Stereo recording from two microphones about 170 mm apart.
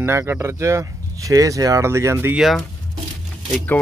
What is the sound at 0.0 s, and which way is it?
Speech, 15° right (ahead or behind).